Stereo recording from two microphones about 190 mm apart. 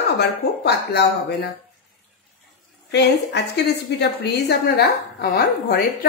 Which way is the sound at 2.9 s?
60° left (ahead or behind).